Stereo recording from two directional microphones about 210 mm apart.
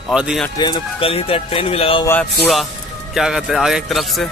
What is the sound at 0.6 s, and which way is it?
Speech, 25° left (ahead or behind).